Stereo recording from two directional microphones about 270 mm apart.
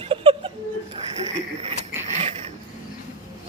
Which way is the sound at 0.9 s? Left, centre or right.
Right.